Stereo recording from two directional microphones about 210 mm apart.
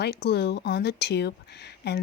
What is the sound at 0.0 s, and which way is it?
Speech, 50° left (ahead or behind).